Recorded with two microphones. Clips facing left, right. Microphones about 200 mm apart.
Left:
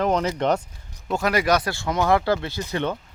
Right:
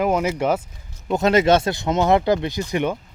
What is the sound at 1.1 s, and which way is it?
Speech, 25° right (ahead or behind).